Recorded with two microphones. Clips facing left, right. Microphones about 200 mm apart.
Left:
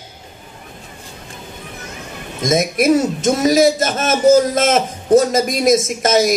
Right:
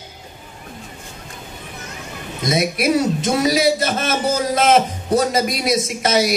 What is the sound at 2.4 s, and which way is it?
A man's voice, 45° left (ahead or behind).